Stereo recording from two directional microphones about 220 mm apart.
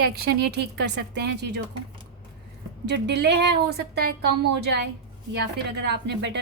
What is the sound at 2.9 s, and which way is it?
A woman's voice, 50° right (ahead or behind).